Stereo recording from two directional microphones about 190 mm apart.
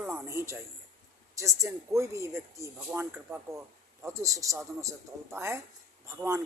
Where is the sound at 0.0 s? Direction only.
10° right (ahead or behind).